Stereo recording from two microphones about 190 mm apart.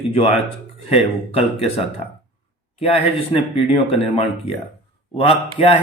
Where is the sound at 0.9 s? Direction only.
30° left (ahead or behind).